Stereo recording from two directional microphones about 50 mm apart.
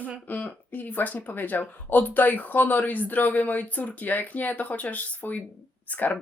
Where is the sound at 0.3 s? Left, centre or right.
Left.